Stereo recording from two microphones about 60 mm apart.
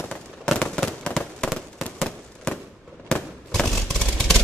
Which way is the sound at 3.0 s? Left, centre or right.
Centre.